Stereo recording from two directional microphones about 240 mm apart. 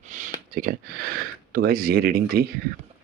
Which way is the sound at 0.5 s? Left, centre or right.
Right.